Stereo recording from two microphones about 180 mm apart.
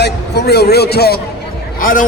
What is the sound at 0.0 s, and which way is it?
A man's voice, 65° left (ahead or behind).